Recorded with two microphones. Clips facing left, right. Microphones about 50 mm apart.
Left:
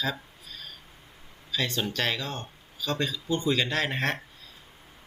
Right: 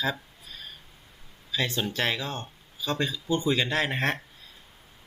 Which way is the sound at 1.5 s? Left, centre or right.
Centre.